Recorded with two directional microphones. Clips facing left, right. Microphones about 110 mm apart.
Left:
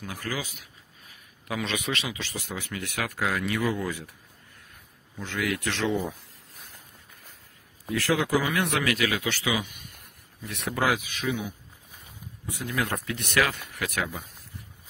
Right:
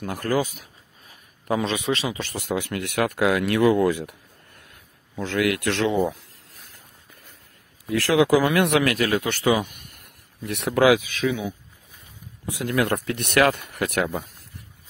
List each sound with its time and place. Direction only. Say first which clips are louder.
0.0 s speech: right 10 dB; 60° right (ahead or behind); by 2.1 s 30° right (ahead or behind)
2.1 s speech: right 8 dB; 55° right (ahead or behind)
5.1 s speech: right 7 dB; 90° right
6.0 s a sound: right 8 dB; 90° right
7.9 s speech: right 7 dB; 90° right; by 8.9 s 70° right (ahead or behind)
8.9 s speech: right 5 dB; 50° right (ahead or behind)
10.4 s speech: right 9 dB; 70° right (ahead or behind)
12.4 s speech: right 7 dB; 75° right (ahead or behind); by 14.2 s 60° right (ahead or behind)